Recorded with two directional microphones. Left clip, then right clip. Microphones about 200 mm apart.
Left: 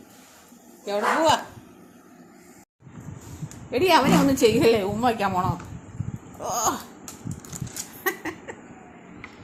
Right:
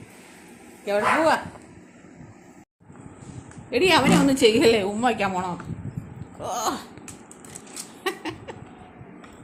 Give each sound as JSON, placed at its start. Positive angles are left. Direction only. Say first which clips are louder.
{"t": 0.9, "sound": "a woman's voice", "louder": "right 1 dB", "side_deg": -15}
{"t": 3.7, "sound": "a woman's voice", "louder": "even", "side_deg": -25}
{"t": 8.2, "sound": "a sound", "louder": "even", "side_deg": -15}